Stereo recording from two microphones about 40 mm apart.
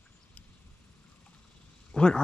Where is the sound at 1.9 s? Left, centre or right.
Left.